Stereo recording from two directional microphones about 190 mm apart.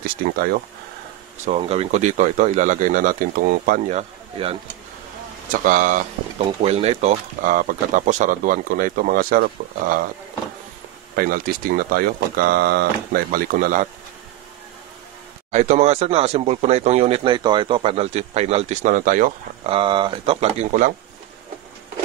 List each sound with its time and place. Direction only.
0.2 s speech: 45° right (ahead or behind)
1.4 s speech: 35° right (ahead or behind)
5.5 s speech: 45° right (ahead or behind)
11.1 s speech: 50° right (ahead or behind)
15.5 s speech: 35° right (ahead or behind)
19.6 s speech: 25° right (ahead or behind)